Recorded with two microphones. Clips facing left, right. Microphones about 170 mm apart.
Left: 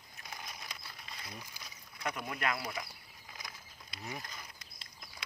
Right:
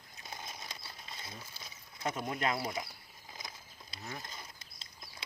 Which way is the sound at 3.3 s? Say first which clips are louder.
Right 1 dB; 25° right (ahead or behind).